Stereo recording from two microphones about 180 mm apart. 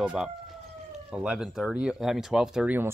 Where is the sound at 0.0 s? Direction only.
5° right (ahead or behind).